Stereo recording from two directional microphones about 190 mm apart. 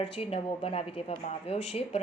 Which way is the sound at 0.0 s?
30° left (ahead or behind).